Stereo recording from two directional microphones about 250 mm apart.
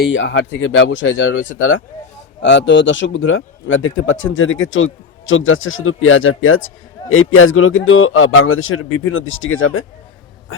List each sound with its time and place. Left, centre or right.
0.0 s speech: left